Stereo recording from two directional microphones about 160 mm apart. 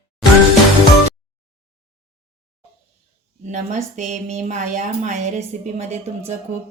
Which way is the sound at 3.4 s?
50° right (ahead or behind).